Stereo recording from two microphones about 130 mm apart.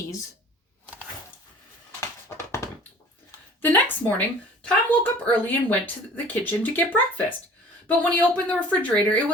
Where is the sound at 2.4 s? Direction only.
25° left (ahead or behind).